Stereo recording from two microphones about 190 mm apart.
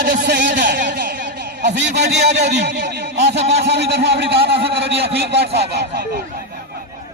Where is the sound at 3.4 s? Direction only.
35° right (ahead or behind).